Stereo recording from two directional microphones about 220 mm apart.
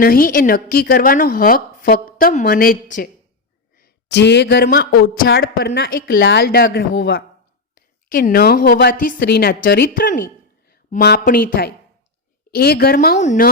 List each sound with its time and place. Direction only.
0.0 s a woman's voice: 40° left (ahead or behind)